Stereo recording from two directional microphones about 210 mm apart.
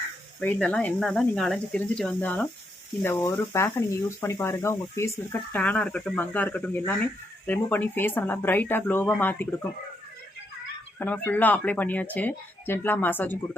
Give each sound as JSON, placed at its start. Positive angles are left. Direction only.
{"t": 0.3, "sound": "speech", "side_deg": 5}
{"t": 10.9, "sound": "speech", "side_deg": 5}